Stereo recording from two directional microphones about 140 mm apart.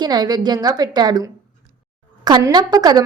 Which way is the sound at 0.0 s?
30° right (ahead or behind).